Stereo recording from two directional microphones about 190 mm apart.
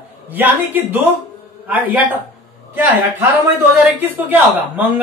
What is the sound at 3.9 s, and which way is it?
A man's voice, 10° right (ahead or behind).